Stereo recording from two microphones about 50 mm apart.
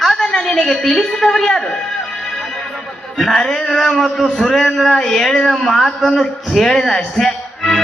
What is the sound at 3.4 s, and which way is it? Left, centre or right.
A woman's voice, centre.